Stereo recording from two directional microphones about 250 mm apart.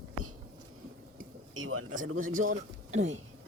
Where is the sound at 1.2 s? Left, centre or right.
Right.